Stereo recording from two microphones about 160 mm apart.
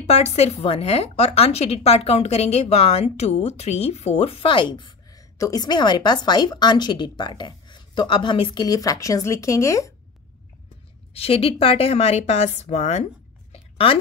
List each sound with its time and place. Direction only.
0.0 s a woman's voice: 45° left (ahead or behind); by 9.9 s 20° left (ahead or behind)
11.1 s a woman's voice: 35° left (ahead or behind)
13.5 s a sound: 35° left (ahead or behind)